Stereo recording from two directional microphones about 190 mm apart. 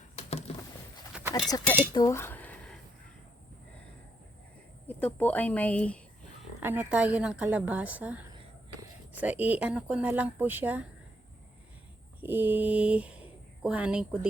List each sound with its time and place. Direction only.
0.2 s a sound: 35° left (ahead or behind)
1.1 s goat: 5° right (ahead or behind)
1.5 s speech: 20° left (ahead or behind)
1.9 s a sound: 20° left (ahead or behind)
4.9 s speech: 10° left (ahead or behind)
6.6 s a woman's voice: 10° right (ahead or behind)
12.2 s speech: 10° right (ahead or behind)